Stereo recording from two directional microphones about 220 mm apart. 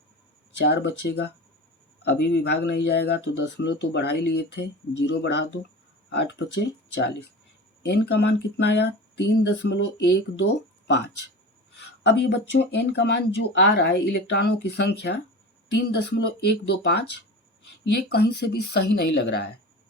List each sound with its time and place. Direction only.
0.6 s speech: 50° left (ahead or behind)